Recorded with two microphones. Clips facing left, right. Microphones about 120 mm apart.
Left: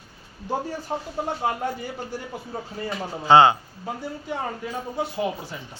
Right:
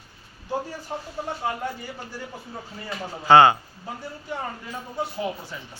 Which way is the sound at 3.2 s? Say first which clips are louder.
Even; 20° left (ahead or behind).